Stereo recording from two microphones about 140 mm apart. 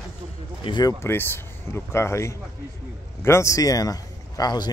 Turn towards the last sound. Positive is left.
turn(degrees=30)  # may be behind; listen again after turning